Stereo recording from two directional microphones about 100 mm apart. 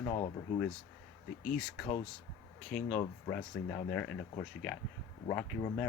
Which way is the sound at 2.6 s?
10° left (ahead or behind).